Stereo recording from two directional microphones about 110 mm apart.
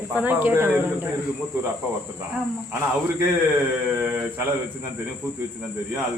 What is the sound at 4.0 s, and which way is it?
Speech, 15° right (ahead or behind).